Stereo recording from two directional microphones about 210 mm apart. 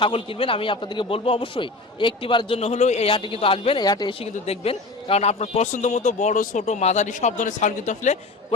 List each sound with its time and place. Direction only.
0.0 s a man's voice: 25° left (ahead or behind)